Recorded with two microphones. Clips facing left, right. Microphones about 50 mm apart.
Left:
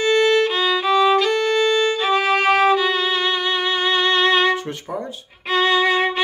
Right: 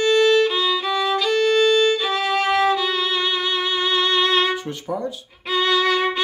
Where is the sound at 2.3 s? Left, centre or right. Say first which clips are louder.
Left 2 dB; left.